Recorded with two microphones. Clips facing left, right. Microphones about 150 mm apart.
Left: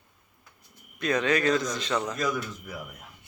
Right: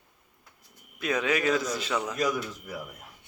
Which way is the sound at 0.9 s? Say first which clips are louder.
Left 2 dB; 5° right (ahead or behind).